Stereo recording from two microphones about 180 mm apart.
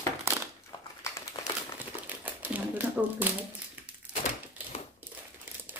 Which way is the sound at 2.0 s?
10° right (ahead or behind).